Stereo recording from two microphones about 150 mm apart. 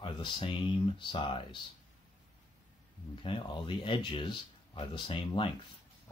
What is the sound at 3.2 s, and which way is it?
Speech, 35° left (ahead or behind).